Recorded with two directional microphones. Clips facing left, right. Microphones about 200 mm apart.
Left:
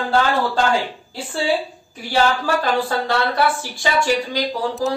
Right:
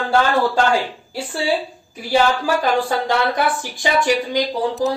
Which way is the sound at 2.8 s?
15° right (ahead or behind).